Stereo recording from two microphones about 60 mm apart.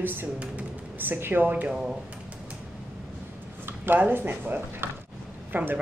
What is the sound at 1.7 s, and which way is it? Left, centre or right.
Speech, centre.